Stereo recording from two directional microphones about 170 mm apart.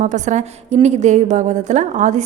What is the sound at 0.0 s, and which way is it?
A woman's voice, 45° right (ahead or behind).